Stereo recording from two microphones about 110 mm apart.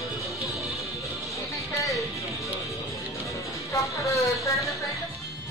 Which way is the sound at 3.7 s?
30° left (ahead or behind).